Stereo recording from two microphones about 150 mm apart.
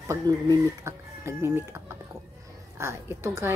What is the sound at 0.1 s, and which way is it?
Speech, 20° right (ahead or behind).